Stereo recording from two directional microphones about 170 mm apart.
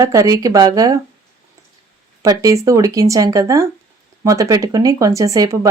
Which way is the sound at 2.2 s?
20° right (ahead or behind).